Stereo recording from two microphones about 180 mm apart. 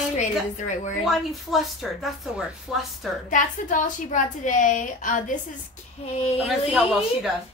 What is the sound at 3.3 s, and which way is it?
A woman's voice, 45° left (ahead or behind).